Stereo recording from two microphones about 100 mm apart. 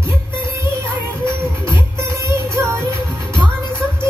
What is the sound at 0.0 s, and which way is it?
Music, 25° right (ahead or behind).